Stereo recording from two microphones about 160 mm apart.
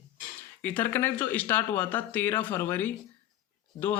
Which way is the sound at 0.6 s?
10° left (ahead or behind).